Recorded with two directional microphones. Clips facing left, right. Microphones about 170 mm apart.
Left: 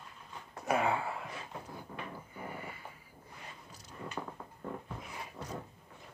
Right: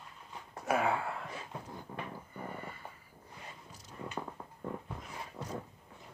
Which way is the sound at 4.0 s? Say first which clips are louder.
Right 1 dB; 20° right (ahead or behind).